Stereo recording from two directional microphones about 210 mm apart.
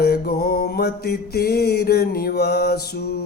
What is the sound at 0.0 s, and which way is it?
Mantra, 45° left (ahead or behind).